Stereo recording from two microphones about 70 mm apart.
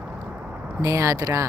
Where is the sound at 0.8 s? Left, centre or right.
Right.